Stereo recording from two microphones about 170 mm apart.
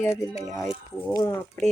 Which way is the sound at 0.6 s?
5° left (ahead or behind).